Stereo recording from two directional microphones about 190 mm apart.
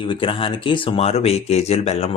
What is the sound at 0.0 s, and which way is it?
Speech, 25° left (ahead or behind).